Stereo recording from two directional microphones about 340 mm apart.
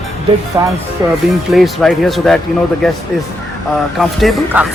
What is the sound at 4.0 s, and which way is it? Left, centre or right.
Speech, centre.